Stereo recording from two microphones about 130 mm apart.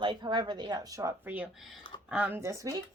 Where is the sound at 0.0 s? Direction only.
35° right (ahead or behind).